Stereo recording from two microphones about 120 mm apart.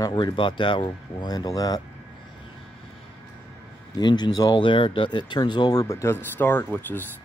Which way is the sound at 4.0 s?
35° left (ahead or behind).